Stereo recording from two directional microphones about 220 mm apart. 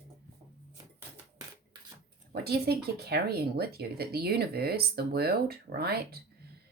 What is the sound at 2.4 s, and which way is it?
Speech, 45° right (ahead or behind).